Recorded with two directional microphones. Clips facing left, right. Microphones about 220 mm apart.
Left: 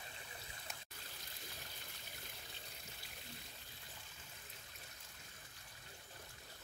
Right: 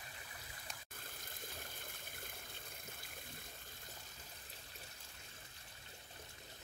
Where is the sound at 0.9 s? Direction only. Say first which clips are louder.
Right 3 dB; 50° right (ahead or behind).